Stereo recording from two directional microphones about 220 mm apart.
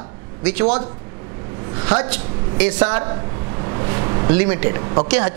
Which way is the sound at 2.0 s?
10° right (ahead or behind).